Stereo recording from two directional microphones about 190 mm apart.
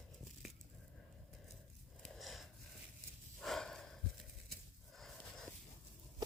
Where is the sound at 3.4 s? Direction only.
Centre (ahead or behind).